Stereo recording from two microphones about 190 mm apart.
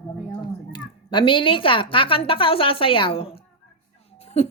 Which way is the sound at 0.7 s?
25° left (ahead or behind).